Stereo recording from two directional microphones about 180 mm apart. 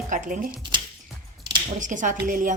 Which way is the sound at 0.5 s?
25° right (ahead or behind).